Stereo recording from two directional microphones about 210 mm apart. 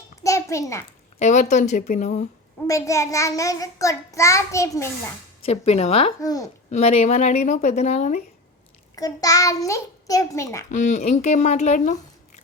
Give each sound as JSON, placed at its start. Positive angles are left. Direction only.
{"t": 0.2, "sound": "a sound", "side_deg": 15}
{"t": 1.2, "sound": "speech", "side_deg": 35}
{"t": 2.6, "sound": "a child's voice", "side_deg": 15}
{"t": 5.5, "sound": "speech", "side_deg": 30}
{"t": 6.1, "sound": "a child's voice", "side_deg": 15}
{"t": 6.7, "sound": "speech", "side_deg": 30}
{"t": 9.0, "sound": "a child's voice", "side_deg": 15}
{"t": 10.7, "sound": "speech", "side_deg": 35}